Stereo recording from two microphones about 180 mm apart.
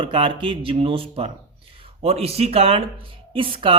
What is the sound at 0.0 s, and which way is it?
Speech, 30° right (ahead or behind).